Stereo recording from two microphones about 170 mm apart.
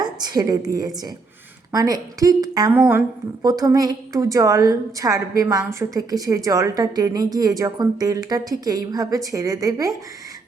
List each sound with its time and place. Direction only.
0.0 s a sound: 25° right (ahead or behind)
1.7 s a woman's voice: 20° right (ahead or behind)
2.7 s a woman's voice: 10° right (ahead or behind)
3.4 s a woman's voice: 20° right (ahead or behind)